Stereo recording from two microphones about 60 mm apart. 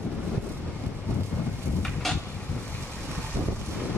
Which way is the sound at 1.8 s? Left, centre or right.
Centre.